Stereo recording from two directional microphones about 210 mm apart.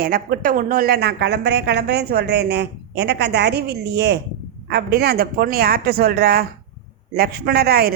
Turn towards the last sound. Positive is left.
turn(degrees=-45)  # may be behind; listen again after turning